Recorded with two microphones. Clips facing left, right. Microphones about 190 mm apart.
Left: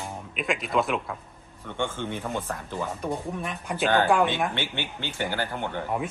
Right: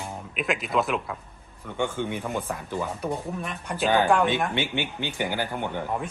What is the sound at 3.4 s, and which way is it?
Speech, centre (ahead or behind).